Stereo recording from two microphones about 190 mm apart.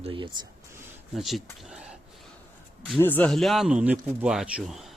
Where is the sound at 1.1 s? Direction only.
Centre (ahead or behind).